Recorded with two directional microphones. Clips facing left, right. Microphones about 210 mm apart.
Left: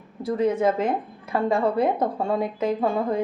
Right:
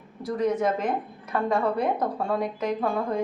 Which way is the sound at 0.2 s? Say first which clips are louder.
Left 3 dB; 25° left (ahead or behind).